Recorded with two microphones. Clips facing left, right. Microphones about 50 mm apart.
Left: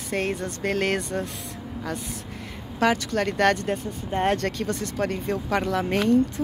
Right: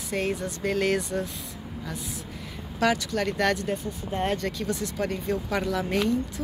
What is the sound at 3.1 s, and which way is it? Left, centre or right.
Speech, left.